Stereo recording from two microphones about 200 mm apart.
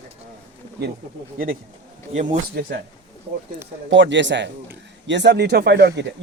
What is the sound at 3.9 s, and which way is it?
Speech, 65° right (ahead or behind).